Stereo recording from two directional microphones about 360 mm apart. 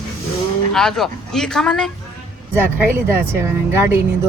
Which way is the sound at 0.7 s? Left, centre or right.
Centre.